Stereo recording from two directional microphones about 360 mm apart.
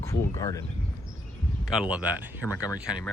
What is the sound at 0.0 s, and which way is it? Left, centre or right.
Speech, centre.